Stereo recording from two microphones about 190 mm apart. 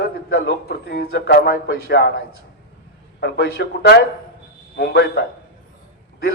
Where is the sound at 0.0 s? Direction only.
60° left (ahead or behind).